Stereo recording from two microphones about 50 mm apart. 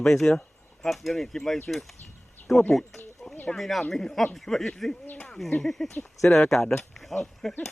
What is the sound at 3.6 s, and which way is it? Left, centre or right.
Speech, centre.